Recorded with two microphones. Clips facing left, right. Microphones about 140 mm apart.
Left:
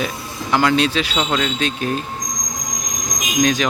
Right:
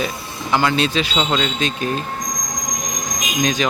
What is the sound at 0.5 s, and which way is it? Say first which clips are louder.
Speech: left 1 dB; centre (ahead or behind).